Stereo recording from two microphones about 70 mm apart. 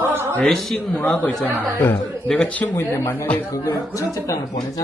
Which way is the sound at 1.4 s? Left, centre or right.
Right.